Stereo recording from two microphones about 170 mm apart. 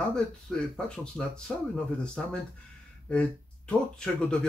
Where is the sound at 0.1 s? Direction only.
5° left (ahead or behind).